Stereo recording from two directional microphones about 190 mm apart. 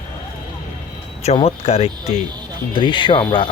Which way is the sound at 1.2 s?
30° left (ahead or behind).